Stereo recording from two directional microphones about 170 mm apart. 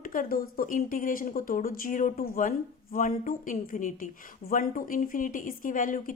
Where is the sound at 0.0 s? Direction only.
55° left (ahead or behind).